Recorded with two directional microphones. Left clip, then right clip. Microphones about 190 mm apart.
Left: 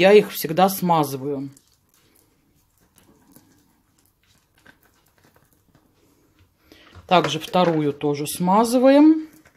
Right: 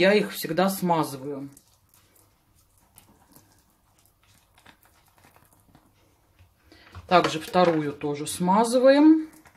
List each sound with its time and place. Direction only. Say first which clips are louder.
0.0 s speech: left 7 dB; 40° left (ahead or behind)
7.1 s speech: left 2 dB; 35° left (ahead or behind)